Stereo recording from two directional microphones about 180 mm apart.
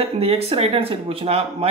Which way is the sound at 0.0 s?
35° right (ahead or behind).